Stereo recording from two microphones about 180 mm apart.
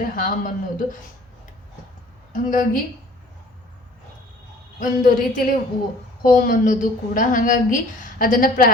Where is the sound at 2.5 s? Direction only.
45° left (ahead or behind).